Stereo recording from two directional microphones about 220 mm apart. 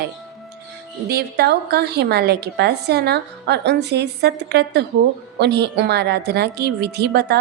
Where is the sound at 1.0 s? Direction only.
45° right (ahead or behind).